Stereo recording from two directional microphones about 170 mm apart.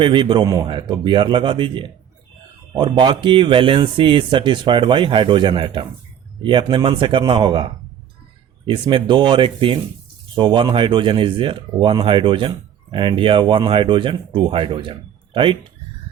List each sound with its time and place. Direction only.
0.0 s speech: 30° right (ahead or behind)